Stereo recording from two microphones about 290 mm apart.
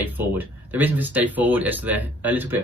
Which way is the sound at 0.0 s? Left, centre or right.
Centre.